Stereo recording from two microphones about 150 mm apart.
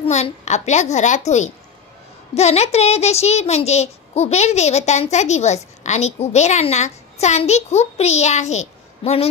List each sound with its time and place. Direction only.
0.0 s a woman's voice: 50° left (ahead or behind)